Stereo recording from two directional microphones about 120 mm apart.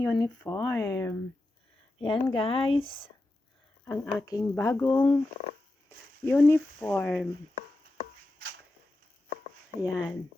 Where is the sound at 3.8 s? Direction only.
20° left (ahead or behind).